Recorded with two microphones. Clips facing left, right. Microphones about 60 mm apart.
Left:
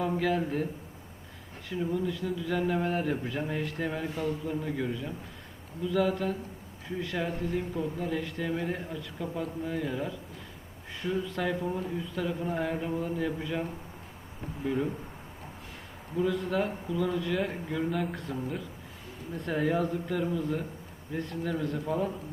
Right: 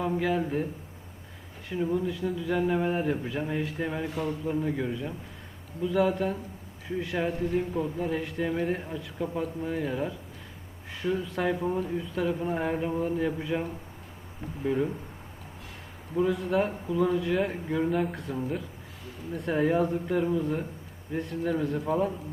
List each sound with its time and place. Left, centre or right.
0.0 s speech: centre
1.7 s speech: centre
6.8 s speech: centre
7.2 s speech: centre
16.1 s speech: centre
19.5 s speech: centre
21.5 s speech: centre